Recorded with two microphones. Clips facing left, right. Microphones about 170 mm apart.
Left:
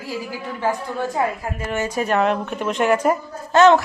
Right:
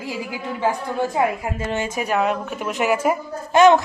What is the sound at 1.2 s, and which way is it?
Speech, 20° right (ahead or behind).